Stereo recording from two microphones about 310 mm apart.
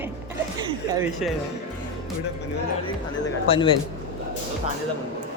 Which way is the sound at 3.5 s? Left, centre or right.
Centre.